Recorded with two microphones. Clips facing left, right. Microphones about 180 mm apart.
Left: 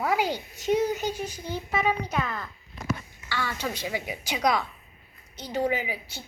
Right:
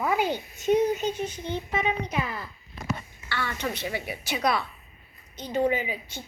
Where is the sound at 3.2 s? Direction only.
10° left (ahead or behind).